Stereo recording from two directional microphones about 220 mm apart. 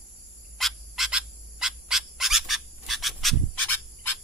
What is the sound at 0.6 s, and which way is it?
Bird, centre (ahead or behind).